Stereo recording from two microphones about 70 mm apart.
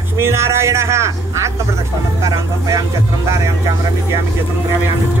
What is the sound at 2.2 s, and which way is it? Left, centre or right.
Vehicle, right.